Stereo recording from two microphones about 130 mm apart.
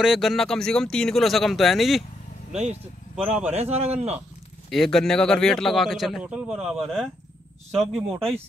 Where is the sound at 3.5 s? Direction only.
55° right (ahead or behind).